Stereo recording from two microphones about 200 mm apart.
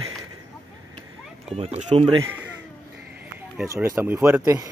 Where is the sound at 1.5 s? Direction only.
30° right (ahead or behind).